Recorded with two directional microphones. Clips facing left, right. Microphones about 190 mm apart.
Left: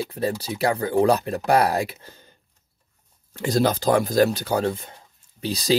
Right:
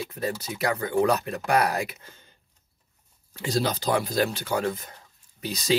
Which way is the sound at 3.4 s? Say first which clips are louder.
Left 5 dB; 50° left (ahead or behind).